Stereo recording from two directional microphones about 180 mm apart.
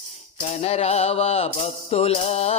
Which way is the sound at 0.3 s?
35° left (ahead or behind).